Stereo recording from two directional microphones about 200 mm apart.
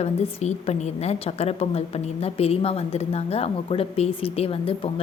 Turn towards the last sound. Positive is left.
turn(degrees=30)  # may be behind; listen again after turning